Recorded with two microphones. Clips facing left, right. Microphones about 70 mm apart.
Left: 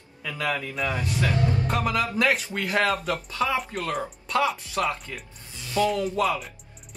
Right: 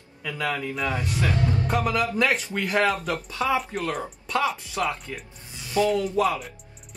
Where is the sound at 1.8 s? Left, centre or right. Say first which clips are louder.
Right 2 dB; centre.